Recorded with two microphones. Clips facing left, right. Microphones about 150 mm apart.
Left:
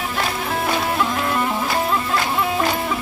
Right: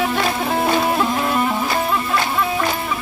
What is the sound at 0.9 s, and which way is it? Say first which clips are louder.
Music: right 2 dB; 20° right (ahead or behind).